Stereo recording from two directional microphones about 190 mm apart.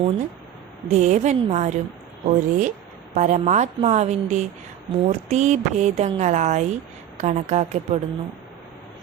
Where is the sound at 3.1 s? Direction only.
40° right (ahead or behind).